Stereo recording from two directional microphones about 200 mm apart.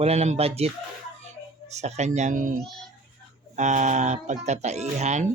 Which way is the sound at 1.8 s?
35° right (ahead or behind).